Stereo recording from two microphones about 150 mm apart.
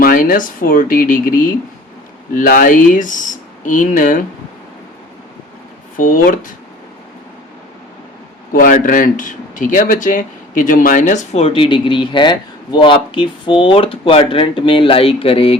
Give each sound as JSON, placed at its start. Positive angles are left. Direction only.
{"t": 0.0, "sound": "speech", "side_deg": 65}
{"t": 6.0, "sound": "speech", "side_deg": 65}
{"t": 8.5, "sound": "speech", "side_deg": 65}